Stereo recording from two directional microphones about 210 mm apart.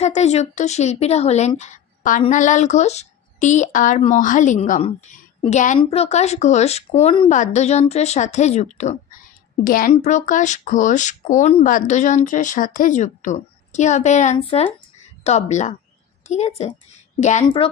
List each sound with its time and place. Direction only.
0.0 s a woman's voice: 30° left (ahead or behind)